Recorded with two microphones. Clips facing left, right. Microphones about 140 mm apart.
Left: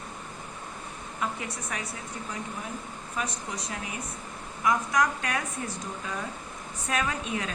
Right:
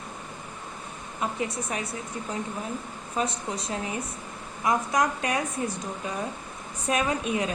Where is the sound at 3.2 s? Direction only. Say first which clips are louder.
Right 5 dB; 25° right (ahead or behind).